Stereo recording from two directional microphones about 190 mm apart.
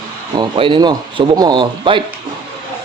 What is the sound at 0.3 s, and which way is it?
Speech, 25° right (ahead or behind).